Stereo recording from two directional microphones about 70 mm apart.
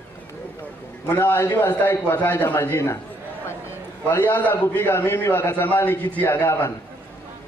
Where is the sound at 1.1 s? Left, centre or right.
Left.